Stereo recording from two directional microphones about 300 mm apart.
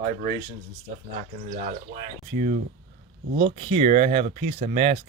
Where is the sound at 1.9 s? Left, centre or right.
Right.